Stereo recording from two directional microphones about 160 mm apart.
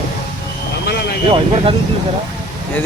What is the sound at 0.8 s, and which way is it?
Vehicle, 90° left.